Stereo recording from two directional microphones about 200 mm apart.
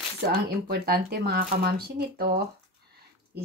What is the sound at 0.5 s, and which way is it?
Speech, 50° right (ahead or behind).